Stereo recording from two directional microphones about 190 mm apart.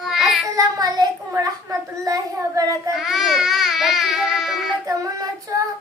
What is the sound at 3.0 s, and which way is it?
Speech, centre (ahead or behind).